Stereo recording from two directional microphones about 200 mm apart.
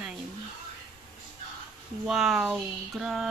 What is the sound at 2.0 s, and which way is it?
Speech, centre (ahead or behind).